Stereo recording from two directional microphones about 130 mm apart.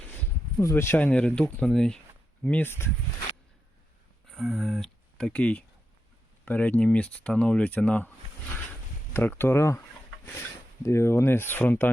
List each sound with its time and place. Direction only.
0.6 s speech: 20° left (ahead or behind)
4.3 s a sound: centre (ahead or behind)
6.4 s speech: 10° left (ahead or behind)
9.1 s speech: 15° left (ahead or behind)
10.8 s speech: 20° left (ahead or behind)